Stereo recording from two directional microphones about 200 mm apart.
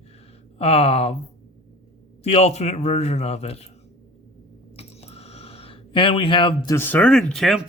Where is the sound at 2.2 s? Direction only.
30° left (ahead or behind).